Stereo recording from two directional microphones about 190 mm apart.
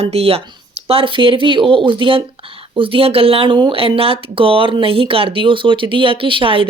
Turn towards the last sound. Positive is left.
turn(degrees=-25)  # may be behind; listen again after turning